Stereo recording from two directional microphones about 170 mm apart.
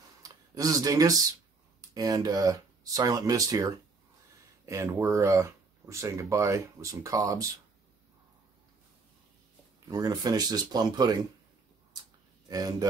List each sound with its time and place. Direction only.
0.2 s a sound: 20° right (ahead or behind)
1.8 s speech: 20° right (ahead or behind)
9.8 s speech: 20° right (ahead or behind)
12.4 s speech: 20° right (ahead or behind)